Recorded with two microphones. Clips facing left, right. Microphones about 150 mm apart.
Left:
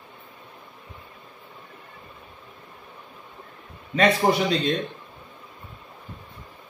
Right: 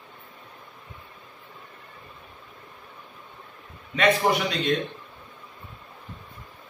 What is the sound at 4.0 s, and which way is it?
Speech, 35° left (ahead or behind).